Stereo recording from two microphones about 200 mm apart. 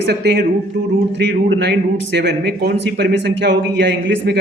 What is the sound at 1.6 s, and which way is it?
A man's voice, 60° right (ahead or behind).